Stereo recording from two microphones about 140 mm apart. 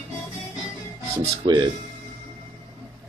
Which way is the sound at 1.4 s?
30° right (ahead or behind).